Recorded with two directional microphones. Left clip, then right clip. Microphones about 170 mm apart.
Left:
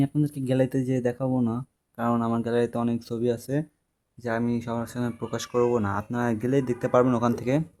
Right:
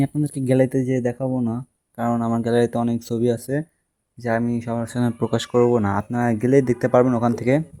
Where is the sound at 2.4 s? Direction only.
25° right (ahead or behind).